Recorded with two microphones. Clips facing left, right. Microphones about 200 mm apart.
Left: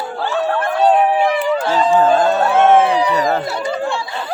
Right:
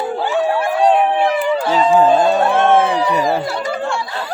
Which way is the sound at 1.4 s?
10° right (ahead or behind).